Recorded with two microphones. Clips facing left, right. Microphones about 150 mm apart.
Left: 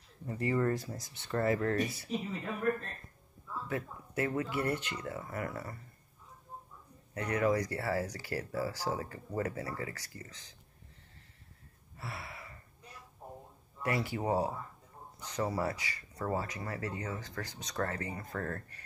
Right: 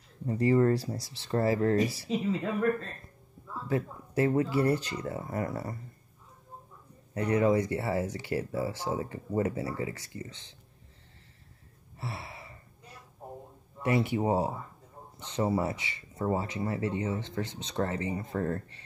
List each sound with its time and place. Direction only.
0.3 s speech: 30° right (ahead or behind)
3.6 s speech: 30° right (ahead or behind)
7.2 s speech: 25° right (ahead or behind)
12.0 s gasp: 25° right (ahead or behind)
13.8 s speech: 25° right (ahead or behind)